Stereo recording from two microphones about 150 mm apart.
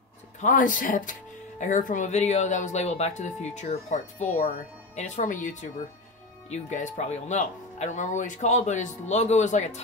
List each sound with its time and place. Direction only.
0.4 s speech: 60° left (ahead or behind)